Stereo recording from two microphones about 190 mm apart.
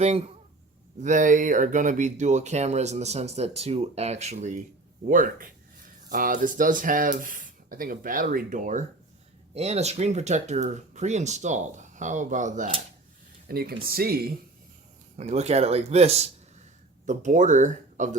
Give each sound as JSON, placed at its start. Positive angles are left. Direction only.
{"t": 0.0, "sound": "speech", "side_deg": -35}
{"t": 13.5, "sound": "speech", "side_deg": -55}
{"t": 15.1, "sound": "speech", "side_deg": -35}